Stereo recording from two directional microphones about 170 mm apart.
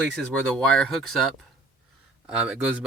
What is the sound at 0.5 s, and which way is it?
Speech, centre (ahead or behind).